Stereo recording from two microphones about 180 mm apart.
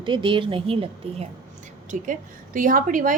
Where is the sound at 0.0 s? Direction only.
25° right (ahead or behind).